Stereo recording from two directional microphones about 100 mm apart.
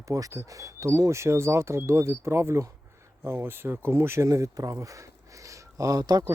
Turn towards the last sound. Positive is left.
turn(degrees=-40)  # may be behind; listen again after turning